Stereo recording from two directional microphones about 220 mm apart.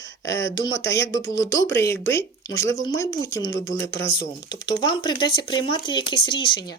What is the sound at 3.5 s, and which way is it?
Speech, 55° left (ahead or behind).